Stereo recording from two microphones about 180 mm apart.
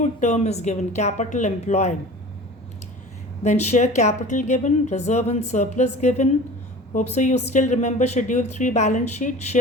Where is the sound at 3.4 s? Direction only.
40° left (ahead or behind).